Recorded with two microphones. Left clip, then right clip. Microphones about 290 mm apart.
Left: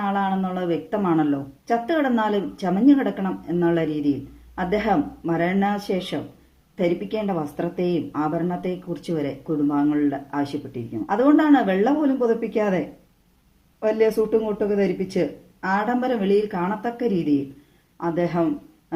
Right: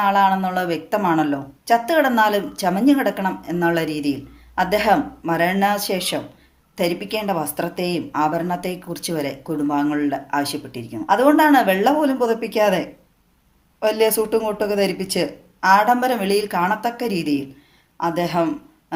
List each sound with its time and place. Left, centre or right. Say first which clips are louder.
0.0 s a woman's voice: right 8 dB; right